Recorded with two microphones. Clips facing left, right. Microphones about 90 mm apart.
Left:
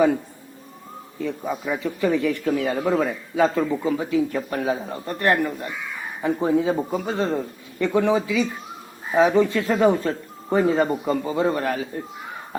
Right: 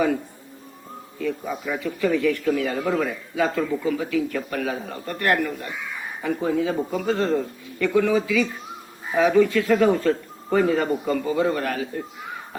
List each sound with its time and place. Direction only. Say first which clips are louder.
1.2 s speech: even; 20° left (ahead or behind)